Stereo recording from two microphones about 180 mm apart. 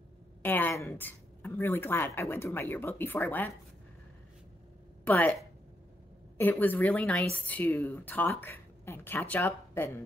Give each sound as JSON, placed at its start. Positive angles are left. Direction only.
{"t": 0.4, "sound": "speech", "side_deg": 10}
{"t": 5.0, "sound": "speech", "side_deg": 10}